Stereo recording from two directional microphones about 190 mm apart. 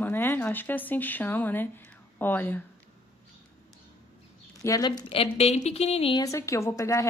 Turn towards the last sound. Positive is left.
turn(degrees=15)  # may be behind; listen again after turning